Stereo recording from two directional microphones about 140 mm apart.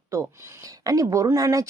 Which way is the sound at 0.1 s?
25° right (ahead or behind).